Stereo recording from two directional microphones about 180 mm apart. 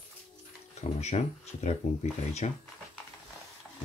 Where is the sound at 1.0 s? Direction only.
40° left (ahead or behind).